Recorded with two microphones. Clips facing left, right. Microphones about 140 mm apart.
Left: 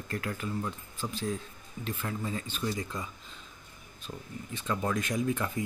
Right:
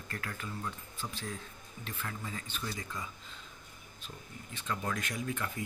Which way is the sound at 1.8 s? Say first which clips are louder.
Left 7 dB; 25° left (ahead or behind).